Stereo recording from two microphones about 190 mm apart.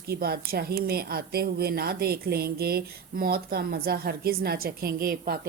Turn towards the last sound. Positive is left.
turn(degrees=-50)  # may be behind; listen again after turning